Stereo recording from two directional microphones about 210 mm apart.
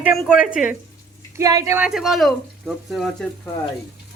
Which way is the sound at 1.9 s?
Centre (ahead or behind).